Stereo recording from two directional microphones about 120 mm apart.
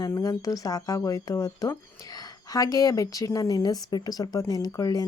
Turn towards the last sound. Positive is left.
turn(degrees=30)  # may be behind; listen again after turning